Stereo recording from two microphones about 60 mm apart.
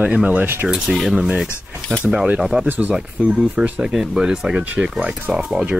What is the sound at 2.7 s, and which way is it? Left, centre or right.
Speech, right.